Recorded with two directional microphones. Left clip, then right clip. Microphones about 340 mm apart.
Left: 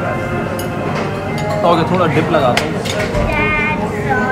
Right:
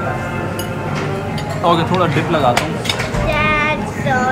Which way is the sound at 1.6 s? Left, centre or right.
Centre.